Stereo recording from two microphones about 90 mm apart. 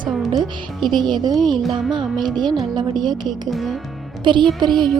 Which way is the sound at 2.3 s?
55° right (ahead or behind).